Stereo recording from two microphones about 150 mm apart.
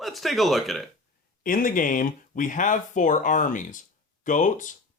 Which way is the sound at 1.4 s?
65° left (ahead or behind).